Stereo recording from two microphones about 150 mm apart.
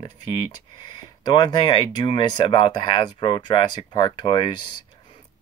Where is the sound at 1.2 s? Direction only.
30° left (ahead or behind).